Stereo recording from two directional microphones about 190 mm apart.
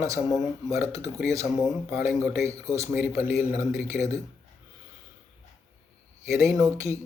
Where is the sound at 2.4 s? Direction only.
15° right (ahead or behind).